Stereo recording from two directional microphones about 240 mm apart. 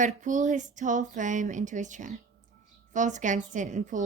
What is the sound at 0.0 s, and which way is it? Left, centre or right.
Speech, right.